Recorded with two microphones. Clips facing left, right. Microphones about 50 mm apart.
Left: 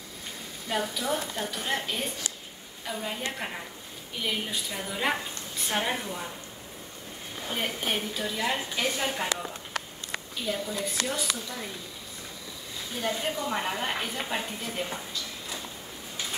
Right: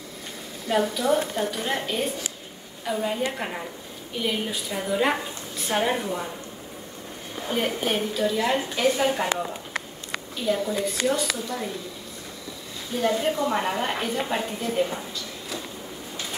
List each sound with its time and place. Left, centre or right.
0.7 s a woman's voice: centre
7.3 s a woman's voice: centre
10.5 s a woman's voice: centre
12.9 s a woman's voice: centre